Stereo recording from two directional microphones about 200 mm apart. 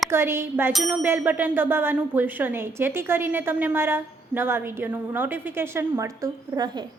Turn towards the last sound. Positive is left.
turn(degrees=-20)  # may be behind; listen again after turning